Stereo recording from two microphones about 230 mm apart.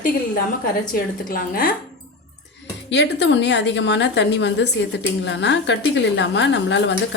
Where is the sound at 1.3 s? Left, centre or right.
Left.